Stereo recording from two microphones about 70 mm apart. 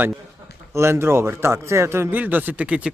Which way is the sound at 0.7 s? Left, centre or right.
Right.